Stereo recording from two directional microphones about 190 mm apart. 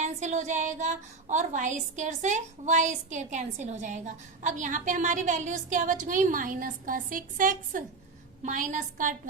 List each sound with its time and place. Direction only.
0.0 s a woman's voice: 40° right (ahead or behind)